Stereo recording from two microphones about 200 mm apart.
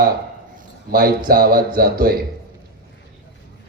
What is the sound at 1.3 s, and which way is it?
Speech, 50° right (ahead or behind).